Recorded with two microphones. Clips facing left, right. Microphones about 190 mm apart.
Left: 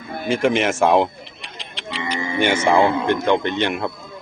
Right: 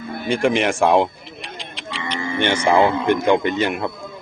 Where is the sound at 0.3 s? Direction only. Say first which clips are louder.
Even; centre (ahead or behind).